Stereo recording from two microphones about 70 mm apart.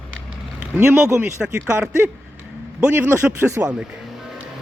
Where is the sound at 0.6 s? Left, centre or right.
Right.